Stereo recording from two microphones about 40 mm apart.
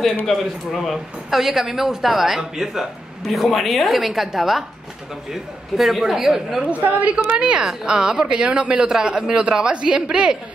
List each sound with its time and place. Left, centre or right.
0.3 s a woman's voice: centre
1.3 s a woman's voice: centre
3.3 s a woman's voice: centre
6.7 s a woman's voice: right
7.3 s a woman's voice: right